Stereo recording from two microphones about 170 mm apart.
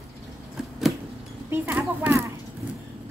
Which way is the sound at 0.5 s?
Centre (ahead or behind).